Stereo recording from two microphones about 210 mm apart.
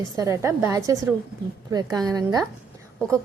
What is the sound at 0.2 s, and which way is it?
A woman's voice, 15° right (ahead or behind).